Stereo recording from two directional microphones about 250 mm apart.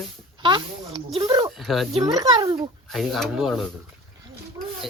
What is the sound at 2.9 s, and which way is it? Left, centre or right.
Speech, centre.